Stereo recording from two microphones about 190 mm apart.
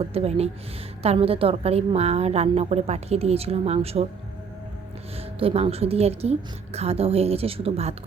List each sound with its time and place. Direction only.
0.0 s a woman's voice: 30° right (ahead or behind)
5.4 s a woman's voice: 30° right (ahead or behind)